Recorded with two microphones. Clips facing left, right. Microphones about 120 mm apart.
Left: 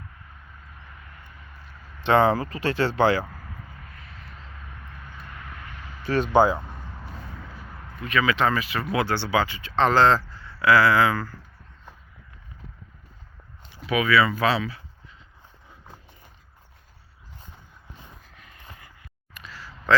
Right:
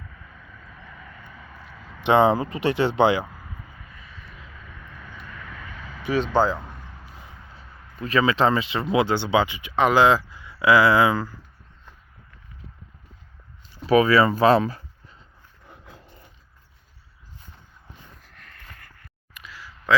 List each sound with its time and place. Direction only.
2.0 s speech: 20° right (ahead or behind)
6.3 s speech: 15° left (ahead or behind)
8.0 s speech: 30° right (ahead or behind)
13.8 s speech: 35° right (ahead or behind)
18.4 s a sound: 15° left (ahead or behind)
19.3 s a sound: 10° right (ahead or behind)